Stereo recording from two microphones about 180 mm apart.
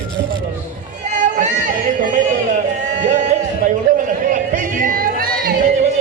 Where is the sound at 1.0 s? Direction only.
45° right (ahead or behind).